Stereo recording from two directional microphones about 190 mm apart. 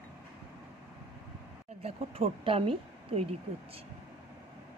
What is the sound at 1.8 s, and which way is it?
A woman's voice, 30° right (ahead or behind).